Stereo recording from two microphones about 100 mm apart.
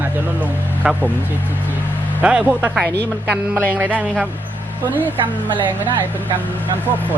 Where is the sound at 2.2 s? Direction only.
15° right (ahead or behind).